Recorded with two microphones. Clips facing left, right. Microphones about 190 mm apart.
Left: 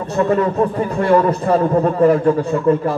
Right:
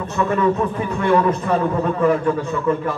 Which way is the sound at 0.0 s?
35° left (ahead or behind).